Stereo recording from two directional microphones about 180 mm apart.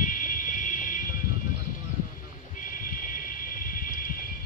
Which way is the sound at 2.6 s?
50° left (ahead or behind).